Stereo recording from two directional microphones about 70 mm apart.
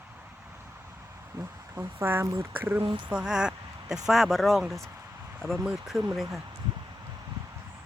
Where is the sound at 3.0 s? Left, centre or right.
Centre.